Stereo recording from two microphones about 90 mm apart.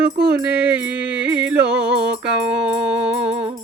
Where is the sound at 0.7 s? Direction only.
10° right (ahead or behind).